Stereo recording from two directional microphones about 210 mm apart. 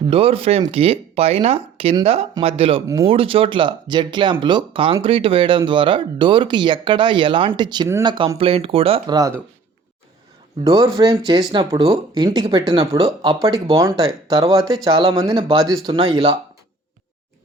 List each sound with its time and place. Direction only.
0.1 s speech: 25° right (ahead or behind)
3.1 s speech: 25° right (ahead or behind)
10.6 s speech: 20° right (ahead or behind)